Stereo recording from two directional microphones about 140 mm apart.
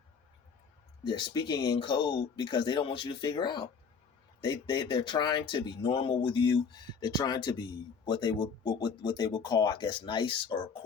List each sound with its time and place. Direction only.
1.0 s speech: 35° left (ahead or behind)